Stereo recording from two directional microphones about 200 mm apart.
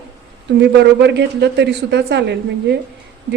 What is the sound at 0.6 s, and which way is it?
A woman's voice, 60° right (ahead or behind).